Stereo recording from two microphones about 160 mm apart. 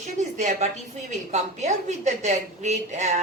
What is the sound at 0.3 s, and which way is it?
Speech, 45° right (ahead or behind).